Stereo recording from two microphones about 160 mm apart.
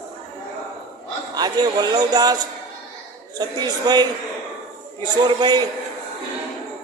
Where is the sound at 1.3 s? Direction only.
25° right (ahead or behind).